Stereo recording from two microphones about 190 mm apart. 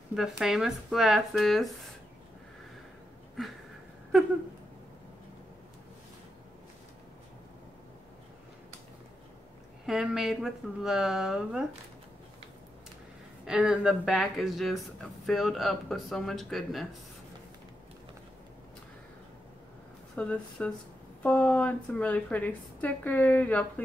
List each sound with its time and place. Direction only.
0.1 s speech: centre (ahead or behind)
9.8 s speech: centre (ahead or behind)
13.5 s speech: 5° right (ahead or behind)
20.2 s a woman's voice: 5° left (ahead or behind)